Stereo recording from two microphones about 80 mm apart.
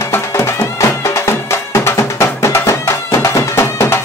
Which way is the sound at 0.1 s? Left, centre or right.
Left.